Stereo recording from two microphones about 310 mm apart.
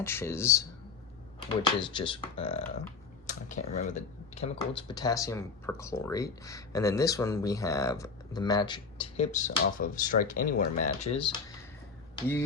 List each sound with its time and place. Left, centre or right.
0.0 s speech: centre
3.8 s speech: left